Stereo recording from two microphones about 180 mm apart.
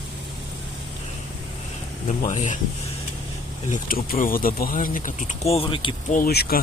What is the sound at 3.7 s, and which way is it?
Speech, 50° left (ahead or behind).